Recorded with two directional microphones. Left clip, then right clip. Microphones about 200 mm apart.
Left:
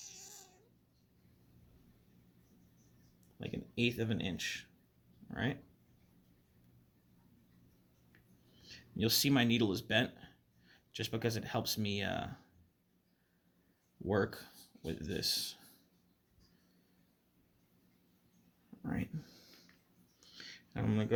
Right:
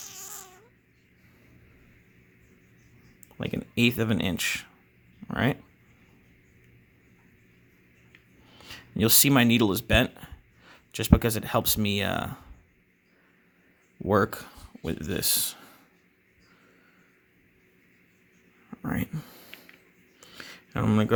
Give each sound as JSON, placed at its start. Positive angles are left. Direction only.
{"t": 0.0, "sound": "baby cry", "side_deg": -55}
{"t": 3.3, "sound": "speech", "side_deg": -45}
{"t": 8.6, "sound": "speech", "side_deg": -45}
{"t": 14.1, "sound": "speech", "side_deg": -45}
{"t": 18.8, "sound": "a sound", "side_deg": -40}